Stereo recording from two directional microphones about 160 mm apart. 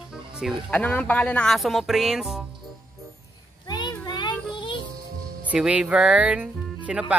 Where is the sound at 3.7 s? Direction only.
25° left (ahead or behind).